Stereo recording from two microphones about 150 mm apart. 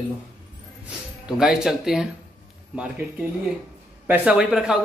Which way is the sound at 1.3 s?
5° right (ahead or behind).